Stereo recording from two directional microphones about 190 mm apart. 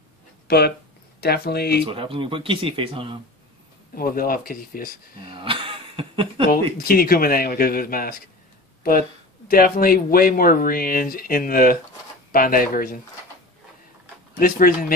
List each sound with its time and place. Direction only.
0.5 s speech: 55° left (ahead or behind)
1.9 s speech: 25° right (ahead or behind)
3.9 s speech: 50° left (ahead or behind)
5.3 s chuckle: 25° right (ahead or behind)
6.8 s speech: 50° left (ahead or behind)
9.5 s speech: 50° left (ahead or behind)
14.4 s speech: 50° left (ahead or behind)